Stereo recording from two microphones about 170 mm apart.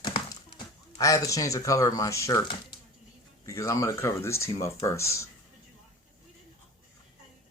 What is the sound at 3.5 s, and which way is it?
Speech, 20° left (ahead or behind).